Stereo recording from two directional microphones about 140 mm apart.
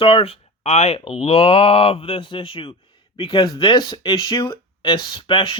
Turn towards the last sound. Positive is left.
turn(degrees=40)  # may be behind; listen again after turning